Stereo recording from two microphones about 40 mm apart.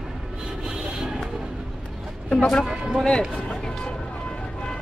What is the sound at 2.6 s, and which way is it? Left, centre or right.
Speech, centre.